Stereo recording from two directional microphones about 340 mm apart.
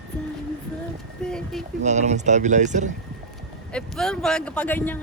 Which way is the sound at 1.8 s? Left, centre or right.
Right.